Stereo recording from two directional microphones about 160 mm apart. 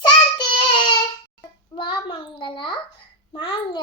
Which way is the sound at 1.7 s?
30° left (ahead or behind).